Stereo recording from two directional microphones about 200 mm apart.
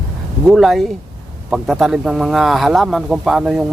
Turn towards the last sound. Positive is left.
turn(degrees=-5)  # may be behind; listen again after turning